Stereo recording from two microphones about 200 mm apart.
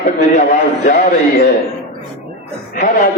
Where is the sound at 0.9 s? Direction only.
35° left (ahead or behind).